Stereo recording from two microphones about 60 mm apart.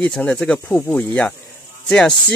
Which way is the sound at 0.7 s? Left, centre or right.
Left.